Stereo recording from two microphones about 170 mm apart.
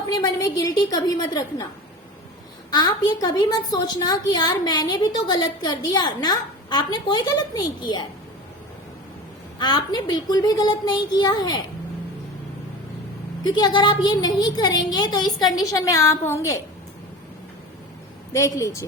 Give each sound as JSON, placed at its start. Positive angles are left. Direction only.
{"t": 0.2, "sound": "a woman's voice", "side_deg": 20}
{"t": 2.6, "sound": "a woman's voice", "side_deg": 25}
{"t": 9.6, "sound": "a woman's voice", "side_deg": 25}
{"t": 13.4, "sound": "a woman's voice", "side_deg": 25}
{"t": 18.3, "sound": "a woman's voice", "side_deg": 20}